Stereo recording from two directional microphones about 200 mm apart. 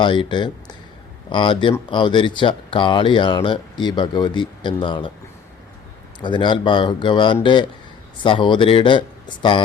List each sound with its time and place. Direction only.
0.0 s speech: 25° left (ahead or behind)
6.1 s speech: 25° left (ahead or behind)